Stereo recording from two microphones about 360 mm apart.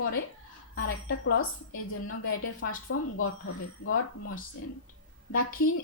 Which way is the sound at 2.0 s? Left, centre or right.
Left.